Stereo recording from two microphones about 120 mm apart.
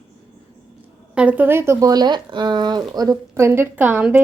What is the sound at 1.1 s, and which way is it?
Speech, 10° right (ahead or behind).